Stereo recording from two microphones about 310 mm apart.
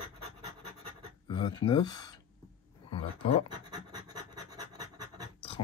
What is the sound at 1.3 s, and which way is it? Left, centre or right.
Speech, centre.